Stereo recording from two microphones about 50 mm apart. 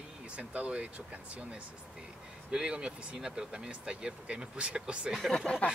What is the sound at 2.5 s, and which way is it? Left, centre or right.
Speech, centre.